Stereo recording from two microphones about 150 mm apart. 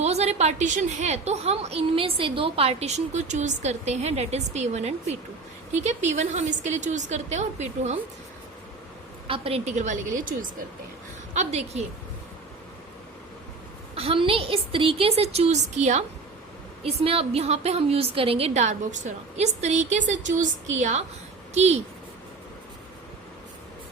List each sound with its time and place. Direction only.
0.0 s a woman's voice: 45° right (ahead or behind)
9.2 s a woman's voice: 40° right (ahead or behind); by 10.3 s 60° right (ahead or behind)
11.3 s a woman's voice: 45° right (ahead or behind)
13.9 s a woman's voice: 40° right (ahead or behind)
16.8 s a woman's voice: 40° right (ahead or behind)